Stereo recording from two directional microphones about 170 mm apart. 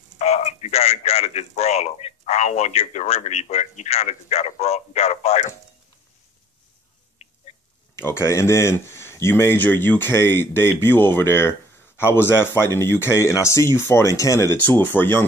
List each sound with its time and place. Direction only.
0.2 s speech: 40° left (ahead or behind)
7.9 s speech: 15° left (ahead or behind)